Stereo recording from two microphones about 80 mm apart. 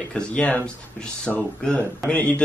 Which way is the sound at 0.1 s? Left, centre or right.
Centre.